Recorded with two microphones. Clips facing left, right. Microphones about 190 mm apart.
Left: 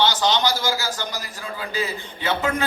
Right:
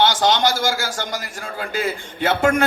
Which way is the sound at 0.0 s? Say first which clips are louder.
Right 3 dB; 50° right (ahead or behind).